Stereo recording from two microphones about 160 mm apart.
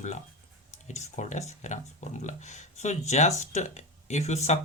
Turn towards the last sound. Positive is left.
turn(degrees=45)  # may be behind; listen again after turning